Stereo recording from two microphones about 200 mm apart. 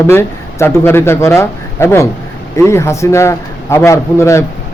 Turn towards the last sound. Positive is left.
turn(degrees=15)  # may be behind; listen again after turning